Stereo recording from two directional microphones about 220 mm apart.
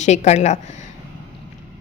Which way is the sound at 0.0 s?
30° left (ahead or behind).